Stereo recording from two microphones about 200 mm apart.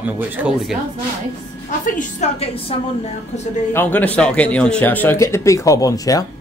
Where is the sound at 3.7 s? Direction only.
10° left (ahead or behind).